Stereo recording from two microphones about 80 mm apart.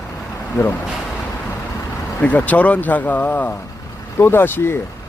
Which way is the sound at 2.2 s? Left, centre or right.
Centre.